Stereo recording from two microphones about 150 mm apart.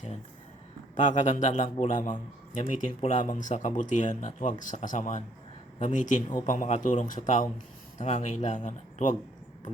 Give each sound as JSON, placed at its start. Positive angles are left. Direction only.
{"t": 0.9, "sound": "speech", "side_deg": 55}